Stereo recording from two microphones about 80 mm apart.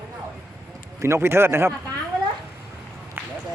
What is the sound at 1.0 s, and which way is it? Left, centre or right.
Speech, right.